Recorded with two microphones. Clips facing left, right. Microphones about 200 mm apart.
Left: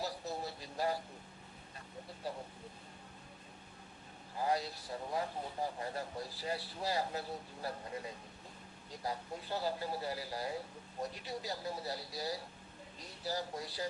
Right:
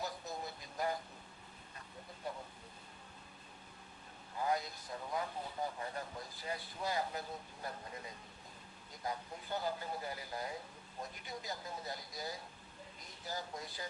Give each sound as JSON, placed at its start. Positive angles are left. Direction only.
{"t": 0.0, "sound": "a sound", "side_deg": 35}
{"t": 4.4, "sound": "speech", "side_deg": 35}
{"t": 8.9, "sound": "speech", "side_deg": 35}